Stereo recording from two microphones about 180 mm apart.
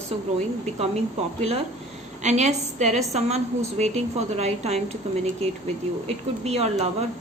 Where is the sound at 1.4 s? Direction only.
35° right (ahead or behind).